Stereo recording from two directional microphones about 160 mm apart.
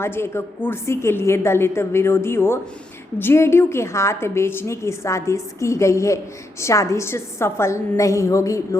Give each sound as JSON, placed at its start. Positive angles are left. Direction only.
{"t": 0.0, "sound": "a woman's voice", "side_deg": 15}